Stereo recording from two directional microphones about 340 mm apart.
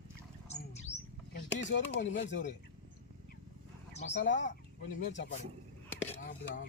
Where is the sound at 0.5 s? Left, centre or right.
Centre.